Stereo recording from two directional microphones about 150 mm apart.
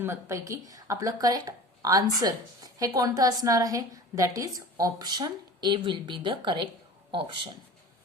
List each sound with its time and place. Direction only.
0.0 s a woman's voice: 20° right (ahead or behind); by 7.5 s 35° right (ahead or behind)